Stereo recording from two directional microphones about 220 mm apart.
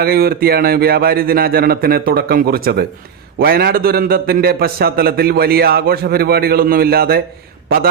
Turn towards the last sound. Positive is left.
turn(degrees=-45)  # may be behind; listen again after turning